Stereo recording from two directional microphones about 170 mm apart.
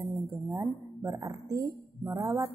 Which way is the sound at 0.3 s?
20° right (ahead or behind).